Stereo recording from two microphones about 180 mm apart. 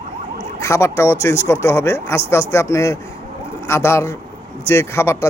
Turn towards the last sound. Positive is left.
turn(degrees=15)  # may be behind; listen again after turning